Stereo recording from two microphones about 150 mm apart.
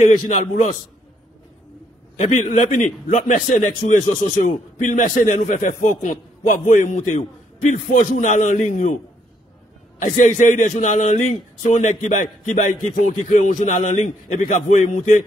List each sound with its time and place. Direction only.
0.3 s a man's voice: 55° left (ahead or behind)
2.1 s a man's voice: 50° left (ahead or behind)